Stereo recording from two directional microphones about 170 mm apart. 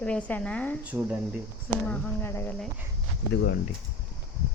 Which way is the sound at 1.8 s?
10° left (ahead or behind).